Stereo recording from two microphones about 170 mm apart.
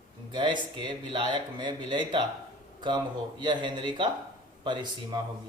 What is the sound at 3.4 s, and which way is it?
Speech, 25° right (ahead or behind).